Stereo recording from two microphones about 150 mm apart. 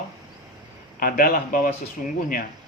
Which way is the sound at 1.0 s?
75° left (ahead or behind).